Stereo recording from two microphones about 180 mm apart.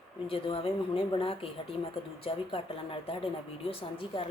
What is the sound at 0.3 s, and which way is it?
A woman's voice, 30° left (ahead or behind).